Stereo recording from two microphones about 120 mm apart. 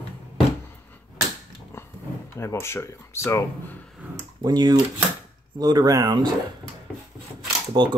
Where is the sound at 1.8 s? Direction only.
20° left (ahead or behind).